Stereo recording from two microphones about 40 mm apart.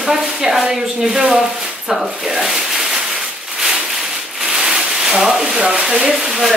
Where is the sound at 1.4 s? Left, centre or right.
Centre.